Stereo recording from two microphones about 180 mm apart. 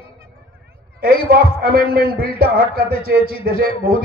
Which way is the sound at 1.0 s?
55° right (ahead or behind).